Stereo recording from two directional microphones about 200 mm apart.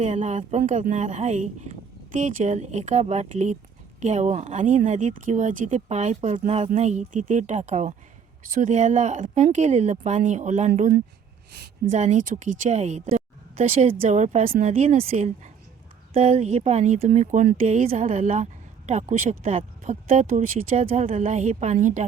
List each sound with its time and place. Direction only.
0.0 s speech: 35° right (ahead or behind)